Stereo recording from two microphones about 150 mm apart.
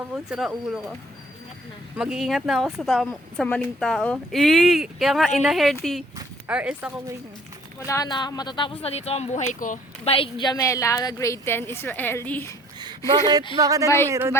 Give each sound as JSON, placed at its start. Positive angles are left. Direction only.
{"t": 0.1, "sound": "speech", "side_deg": -5}
{"t": 2.0, "sound": "speech", "side_deg": -5}
{"t": 7.9, "sound": "speech", "side_deg": 25}
{"t": 9.5, "sound": "speech", "side_deg": 60}
{"t": 10.0, "sound": "a woman's voice", "side_deg": 40}
{"t": 13.6, "sound": "speech", "side_deg": -25}
{"t": 13.8, "sound": "speech", "side_deg": 15}
{"t": 14.1, "sound": "speech", "side_deg": -15}